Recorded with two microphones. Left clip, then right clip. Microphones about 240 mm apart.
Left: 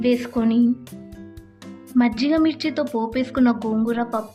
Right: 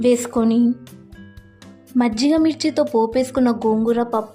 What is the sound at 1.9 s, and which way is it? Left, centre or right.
Speech, centre.